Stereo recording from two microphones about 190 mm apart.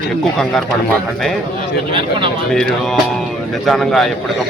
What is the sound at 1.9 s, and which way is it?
Speech, 25° right (ahead or behind).